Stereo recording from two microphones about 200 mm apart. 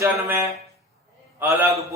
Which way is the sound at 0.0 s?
10° right (ahead or behind).